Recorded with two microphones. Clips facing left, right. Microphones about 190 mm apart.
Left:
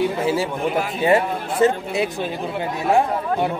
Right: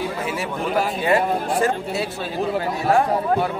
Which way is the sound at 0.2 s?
30° left (ahead or behind).